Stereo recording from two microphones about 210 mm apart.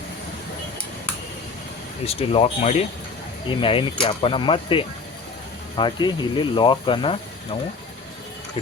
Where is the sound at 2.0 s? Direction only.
30° left (ahead or behind).